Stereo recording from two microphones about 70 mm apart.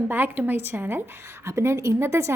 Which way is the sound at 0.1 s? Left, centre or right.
Right.